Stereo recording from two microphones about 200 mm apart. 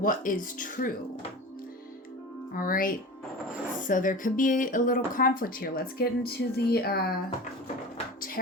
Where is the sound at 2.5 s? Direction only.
45° left (ahead or behind).